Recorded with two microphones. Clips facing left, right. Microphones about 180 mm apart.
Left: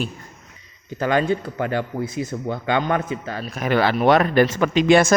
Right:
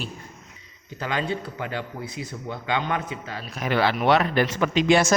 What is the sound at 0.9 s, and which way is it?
A man's voice, 50° left (ahead or behind).